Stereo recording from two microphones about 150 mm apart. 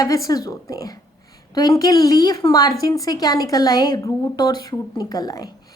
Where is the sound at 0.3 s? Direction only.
25° left (ahead or behind).